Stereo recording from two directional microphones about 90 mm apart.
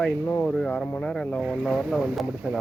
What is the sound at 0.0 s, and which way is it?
Speech, 15° left (ahead or behind).